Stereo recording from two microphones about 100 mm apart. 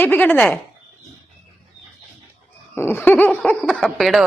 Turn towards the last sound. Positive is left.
turn(degrees=0)  # may be behind; listen again after turning